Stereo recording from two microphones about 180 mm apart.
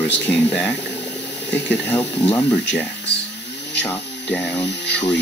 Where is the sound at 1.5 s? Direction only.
10° left (ahead or behind).